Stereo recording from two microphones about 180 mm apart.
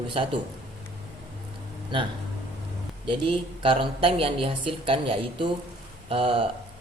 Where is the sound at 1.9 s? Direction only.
30° right (ahead or behind).